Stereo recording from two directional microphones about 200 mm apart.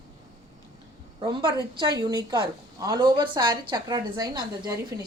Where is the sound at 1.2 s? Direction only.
25° right (ahead or behind).